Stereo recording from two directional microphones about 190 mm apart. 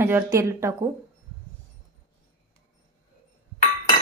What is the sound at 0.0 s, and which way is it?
Speech, 15° right (ahead or behind).